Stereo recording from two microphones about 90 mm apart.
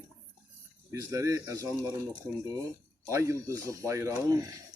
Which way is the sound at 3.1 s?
35° right (ahead or behind).